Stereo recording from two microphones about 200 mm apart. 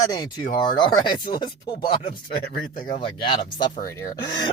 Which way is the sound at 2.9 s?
25° left (ahead or behind).